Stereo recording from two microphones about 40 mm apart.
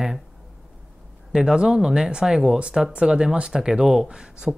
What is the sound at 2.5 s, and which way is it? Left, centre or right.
Speech, right.